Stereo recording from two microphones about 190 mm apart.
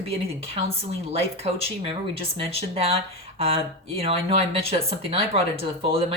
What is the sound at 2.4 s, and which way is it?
Speech, 30° right (ahead or behind).